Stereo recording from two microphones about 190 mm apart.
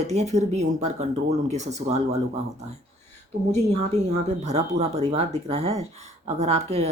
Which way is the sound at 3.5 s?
35° right (ahead or behind).